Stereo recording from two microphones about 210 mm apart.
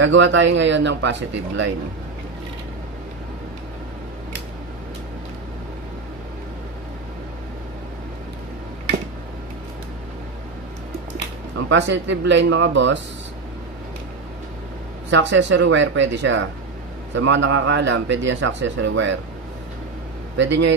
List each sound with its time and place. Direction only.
0.0 s speech: 60° right (ahead or behind)
11.7 s speech: 60° right (ahead or behind)
15.0 s speech: 60° right (ahead or behind)
20.3 s speech: 60° right (ahead or behind)